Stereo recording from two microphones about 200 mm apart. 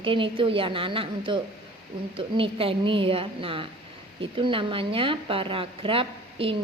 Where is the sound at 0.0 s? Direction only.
25° right (ahead or behind).